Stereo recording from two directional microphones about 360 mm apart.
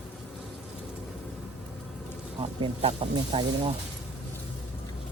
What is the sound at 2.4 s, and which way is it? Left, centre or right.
Speech, centre.